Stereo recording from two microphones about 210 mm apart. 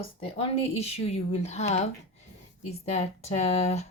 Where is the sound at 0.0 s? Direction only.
25° left (ahead or behind).